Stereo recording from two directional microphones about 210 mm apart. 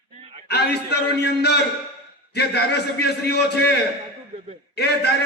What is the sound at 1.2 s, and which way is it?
A man's voice, 50° left (ahead or behind).